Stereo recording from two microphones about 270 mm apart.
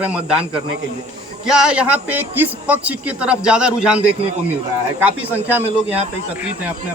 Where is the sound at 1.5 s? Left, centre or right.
Centre.